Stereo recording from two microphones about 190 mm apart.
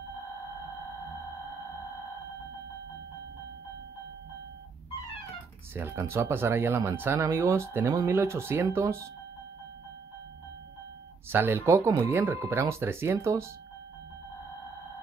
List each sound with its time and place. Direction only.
5.8 s speech: 15° right (ahead or behind)
11.2 s speech: 10° right (ahead or behind)